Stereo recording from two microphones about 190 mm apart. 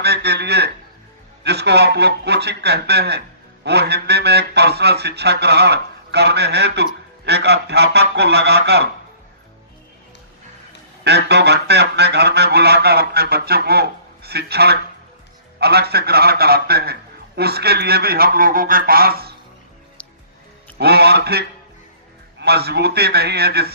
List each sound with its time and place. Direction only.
0.0 s a sound: 60° right (ahead or behind)
1.5 s music: 60° right (ahead or behind)
11.0 s music: 60° right (ahead or behind)
20.7 s music: 55° right (ahead or behind)